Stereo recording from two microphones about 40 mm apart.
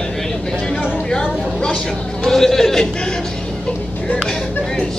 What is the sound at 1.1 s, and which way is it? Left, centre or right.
Chatter, centre.